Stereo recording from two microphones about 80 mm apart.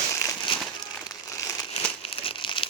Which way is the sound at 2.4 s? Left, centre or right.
Left.